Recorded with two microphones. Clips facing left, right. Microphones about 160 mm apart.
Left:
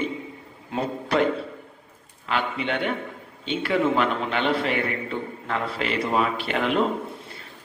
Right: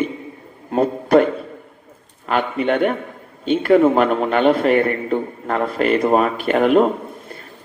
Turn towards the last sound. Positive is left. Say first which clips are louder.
# right 5 dB
turn(degrees=-45)  # may be behind; listen again after turning